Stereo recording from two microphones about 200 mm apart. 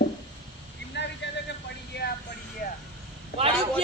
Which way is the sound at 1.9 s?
60° left (ahead or behind).